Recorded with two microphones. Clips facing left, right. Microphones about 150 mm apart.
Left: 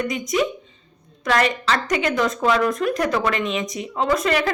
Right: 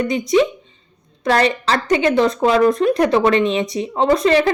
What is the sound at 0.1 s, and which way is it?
A woman's voice, 30° right (ahead or behind).